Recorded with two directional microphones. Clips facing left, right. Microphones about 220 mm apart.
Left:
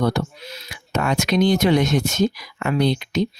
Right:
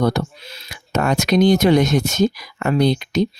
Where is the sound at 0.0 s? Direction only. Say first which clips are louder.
Right 2 dB; 40° right (ahead or behind).